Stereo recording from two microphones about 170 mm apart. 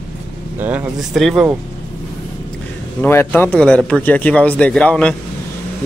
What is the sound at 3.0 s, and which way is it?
Speech, 10° left (ahead or behind).